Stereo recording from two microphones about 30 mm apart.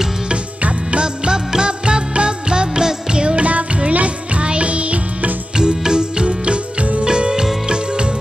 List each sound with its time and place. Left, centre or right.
0.9 s music: right
3.3 s music: right
5.6 s music: right